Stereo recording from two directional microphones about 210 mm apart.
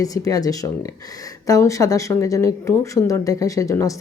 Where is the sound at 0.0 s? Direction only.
15° left (ahead or behind).